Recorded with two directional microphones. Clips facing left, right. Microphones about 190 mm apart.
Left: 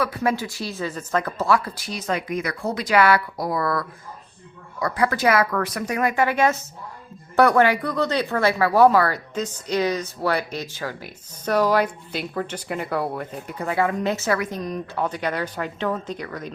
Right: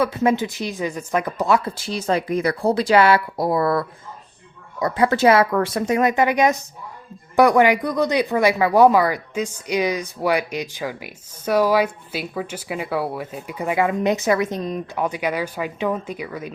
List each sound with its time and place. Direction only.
0.0 s speech: 25° right (ahead or behind)